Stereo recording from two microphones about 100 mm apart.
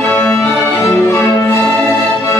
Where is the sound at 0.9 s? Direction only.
25° left (ahead or behind).